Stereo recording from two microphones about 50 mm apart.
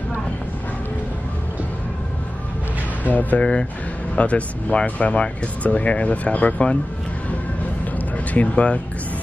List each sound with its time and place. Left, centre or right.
3.0 s speech: left
8.3 s speech: left